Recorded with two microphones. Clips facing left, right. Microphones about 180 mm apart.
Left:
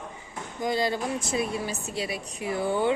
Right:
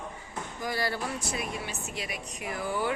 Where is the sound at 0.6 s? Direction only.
20° left (ahead or behind).